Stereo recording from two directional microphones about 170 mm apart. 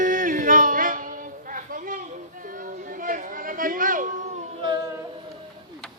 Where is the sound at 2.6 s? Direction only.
50° right (ahead or behind).